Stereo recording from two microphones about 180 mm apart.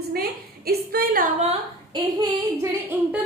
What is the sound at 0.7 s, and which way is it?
Speech, 55° right (ahead or behind).